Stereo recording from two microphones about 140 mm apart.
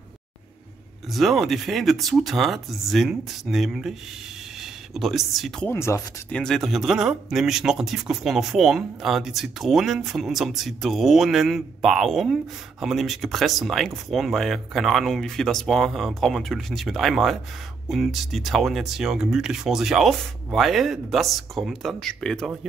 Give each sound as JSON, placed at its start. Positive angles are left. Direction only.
{"t": 1.1, "sound": "speech", "side_deg": 0}
{"t": 5.7, "sound": "speech", "side_deg": 20}
{"t": 6.3, "sound": "speech", "side_deg": 5}